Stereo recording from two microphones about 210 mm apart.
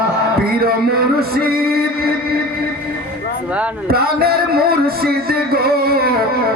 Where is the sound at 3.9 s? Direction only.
45° right (ahead or behind).